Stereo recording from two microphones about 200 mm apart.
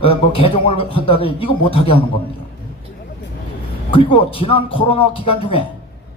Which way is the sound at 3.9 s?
25° left (ahead or behind).